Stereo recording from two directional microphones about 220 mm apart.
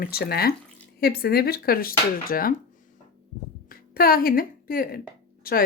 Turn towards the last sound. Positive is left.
turn(degrees=40)  # may be behind; listen again after turning